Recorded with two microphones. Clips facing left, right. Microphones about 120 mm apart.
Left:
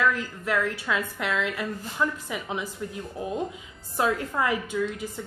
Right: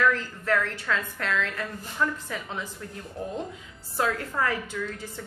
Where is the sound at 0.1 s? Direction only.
10° left (ahead or behind).